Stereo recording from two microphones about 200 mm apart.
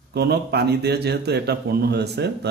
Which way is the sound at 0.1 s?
55° right (ahead or behind).